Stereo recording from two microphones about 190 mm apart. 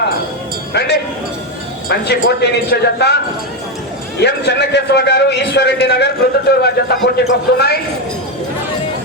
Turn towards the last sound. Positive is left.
turn(degrees=55)  # may be behind; listen again after turning